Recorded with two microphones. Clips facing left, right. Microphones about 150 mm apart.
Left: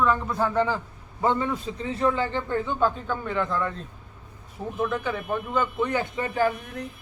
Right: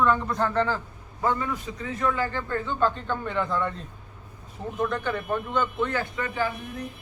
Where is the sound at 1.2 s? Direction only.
25° left (ahead or behind).